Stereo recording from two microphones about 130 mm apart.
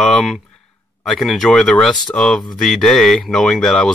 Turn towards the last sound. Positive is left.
turn(degrees=5)  # may be behind; listen again after turning